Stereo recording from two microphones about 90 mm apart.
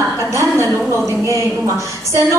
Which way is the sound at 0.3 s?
30° right (ahead or behind).